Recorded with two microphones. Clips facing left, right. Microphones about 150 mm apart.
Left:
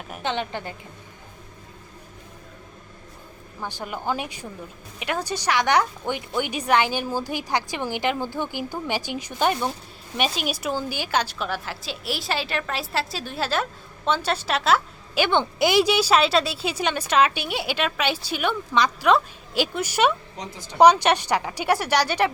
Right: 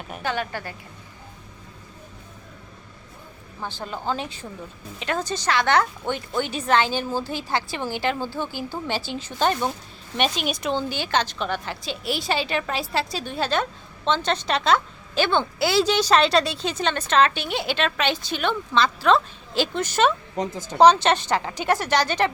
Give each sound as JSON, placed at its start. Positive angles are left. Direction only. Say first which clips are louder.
{"t": 0.2, "sound": "a woman's voice", "louder": "even", "side_deg": 20}
{"t": 3.6, "sound": "a woman's voice", "louder": "even", "side_deg": 15}
{"t": 20.3, "sound": "a woman's voice", "louder": "right 9 dB", "side_deg": -50}
{"t": 20.7, "sound": "a woman's voice", "louder": "even", "side_deg": 10}